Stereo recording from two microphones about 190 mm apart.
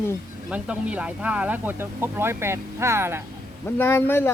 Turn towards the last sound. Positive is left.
turn(degrees=10)  # may be behind; listen again after turning